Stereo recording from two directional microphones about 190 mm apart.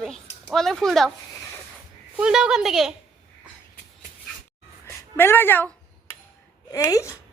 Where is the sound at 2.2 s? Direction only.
5° right (ahead or behind).